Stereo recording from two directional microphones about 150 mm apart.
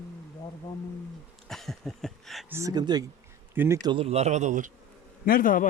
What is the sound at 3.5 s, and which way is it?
Speech, 15° right (ahead or behind).